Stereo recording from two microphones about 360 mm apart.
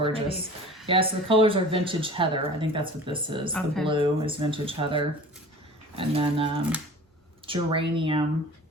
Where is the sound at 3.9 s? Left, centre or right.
Centre.